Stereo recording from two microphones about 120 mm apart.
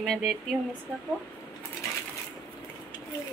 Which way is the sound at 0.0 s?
Centre (ahead or behind).